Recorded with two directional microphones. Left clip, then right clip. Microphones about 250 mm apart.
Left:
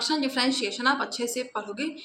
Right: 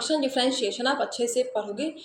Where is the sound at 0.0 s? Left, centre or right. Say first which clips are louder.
Right 1 dB; centre.